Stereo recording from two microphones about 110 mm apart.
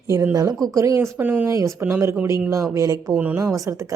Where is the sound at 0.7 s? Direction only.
30° right (ahead or behind); by 1.5 s 15° right (ahead or behind).